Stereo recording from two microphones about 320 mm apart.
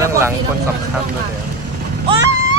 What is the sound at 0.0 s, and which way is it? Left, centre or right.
Speech, centre.